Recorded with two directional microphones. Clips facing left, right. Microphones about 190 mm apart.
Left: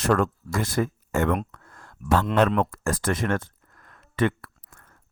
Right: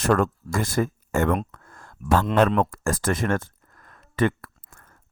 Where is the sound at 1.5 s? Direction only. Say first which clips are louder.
Right 1 dB; 45° right (ahead or behind).